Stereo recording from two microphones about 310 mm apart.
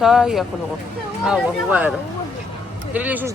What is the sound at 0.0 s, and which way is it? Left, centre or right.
Speech, centre.